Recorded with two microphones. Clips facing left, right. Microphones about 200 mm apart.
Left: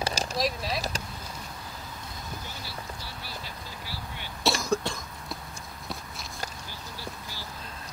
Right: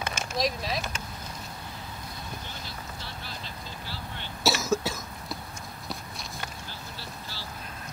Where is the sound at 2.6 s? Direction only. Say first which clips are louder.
Left 1 dB; 10° left (ahead or behind).